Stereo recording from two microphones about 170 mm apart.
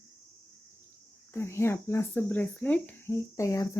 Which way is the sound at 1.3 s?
15° left (ahead or behind).